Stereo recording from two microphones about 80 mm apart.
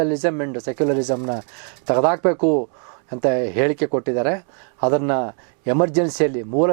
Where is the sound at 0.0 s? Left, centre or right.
Centre.